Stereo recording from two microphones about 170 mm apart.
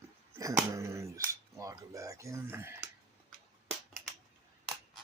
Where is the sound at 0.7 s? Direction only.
15° right (ahead or behind).